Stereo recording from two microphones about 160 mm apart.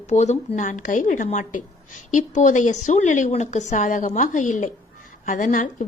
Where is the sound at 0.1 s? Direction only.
45° left (ahead or behind).